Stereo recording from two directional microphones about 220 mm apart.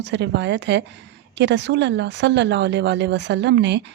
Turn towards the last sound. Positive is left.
turn(degrees=-50)  # may be behind; listen again after turning